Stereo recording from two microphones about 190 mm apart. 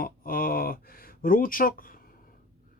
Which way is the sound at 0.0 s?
50° left (ahead or behind).